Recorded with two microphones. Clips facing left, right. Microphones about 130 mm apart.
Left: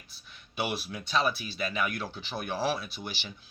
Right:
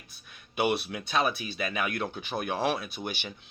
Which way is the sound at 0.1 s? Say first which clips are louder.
Right 2 dB; 50° right (ahead or behind).